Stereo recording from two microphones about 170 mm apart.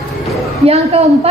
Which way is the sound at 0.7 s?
35° right (ahead or behind).